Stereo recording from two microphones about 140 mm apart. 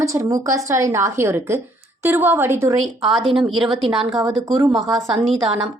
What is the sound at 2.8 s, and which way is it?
Speech, centre (ahead or behind).